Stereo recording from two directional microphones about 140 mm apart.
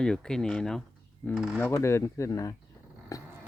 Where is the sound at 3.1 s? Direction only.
25° left (ahead or behind).